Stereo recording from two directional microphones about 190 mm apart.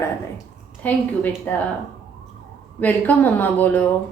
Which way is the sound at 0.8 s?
10° left (ahead or behind).